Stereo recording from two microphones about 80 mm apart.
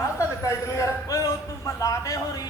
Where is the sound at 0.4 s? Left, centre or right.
Left.